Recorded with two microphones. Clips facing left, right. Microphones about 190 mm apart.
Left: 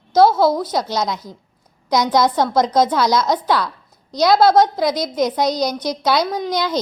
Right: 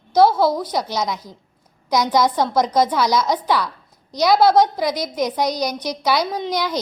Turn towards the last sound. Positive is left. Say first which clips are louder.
# left 2 dB
turn(degrees=-10)  # may be behind; listen again after turning